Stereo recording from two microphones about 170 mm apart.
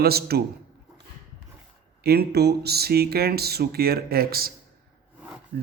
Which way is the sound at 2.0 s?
65° right (ahead or behind).